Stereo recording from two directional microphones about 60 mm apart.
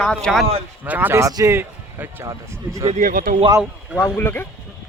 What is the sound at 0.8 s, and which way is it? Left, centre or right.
Speech, right.